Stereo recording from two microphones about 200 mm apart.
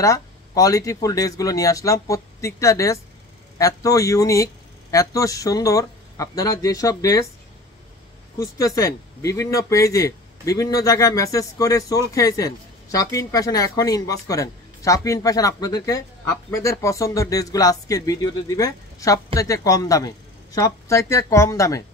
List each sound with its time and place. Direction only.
0.0 s speech: 15° left (ahead or behind)
8.4 s speech: 15° left (ahead or behind)